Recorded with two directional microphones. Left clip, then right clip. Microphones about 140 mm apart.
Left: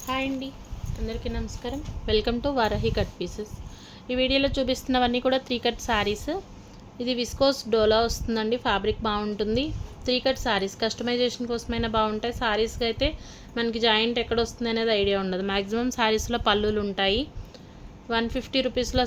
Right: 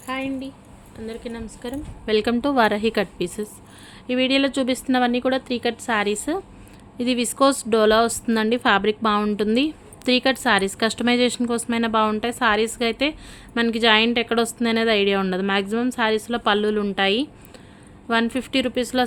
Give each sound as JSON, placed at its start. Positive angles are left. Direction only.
{"t": 0.0, "sound": "a woman's voice", "side_deg": -30}
{"t": 2.1, "sound": "a woman's voice", "side_deg": -55}
{"t": 4.0, "sound": "a woman's voice", "side_deg": -50}
{"t": 7.0, "sound": "a woman's voice", "side_deg": -60}
{"t": 15.7, "sound": "a woman's voice", "side_deg": -30}
{"t": 18.1, "sound": "a woman's voice", "side_deg": -55}